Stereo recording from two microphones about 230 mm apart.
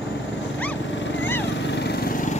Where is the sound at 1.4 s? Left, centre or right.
Left.